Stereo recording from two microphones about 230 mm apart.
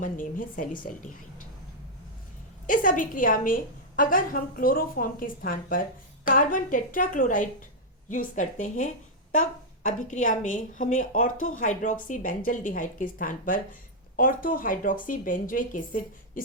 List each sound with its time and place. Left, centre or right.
0.0 s a woman's voice: left
2.6 s a woman's voice: left